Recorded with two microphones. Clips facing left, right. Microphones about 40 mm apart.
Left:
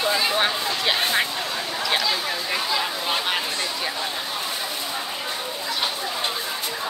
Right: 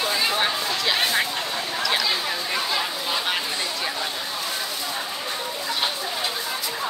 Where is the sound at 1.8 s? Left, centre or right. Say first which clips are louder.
Even; centre.